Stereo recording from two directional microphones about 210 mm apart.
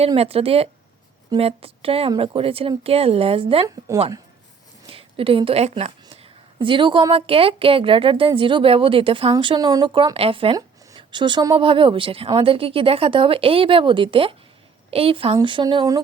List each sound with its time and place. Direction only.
0.0 s a woman's voice: 30° right (ahead or behind)
3.9 s speech: 15° right (ahead or behind)
4.9 s a woman's voice: 25° right (ahead or behind)